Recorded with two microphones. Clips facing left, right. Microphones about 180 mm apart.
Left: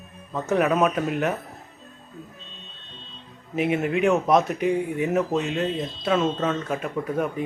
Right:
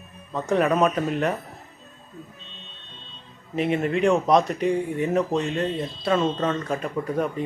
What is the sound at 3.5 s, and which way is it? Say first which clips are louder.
Speech: even; 5° left (ahead or behind).